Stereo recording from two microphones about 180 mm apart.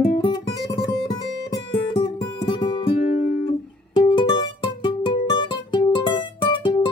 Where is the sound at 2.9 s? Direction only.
45° left (ahead or behind).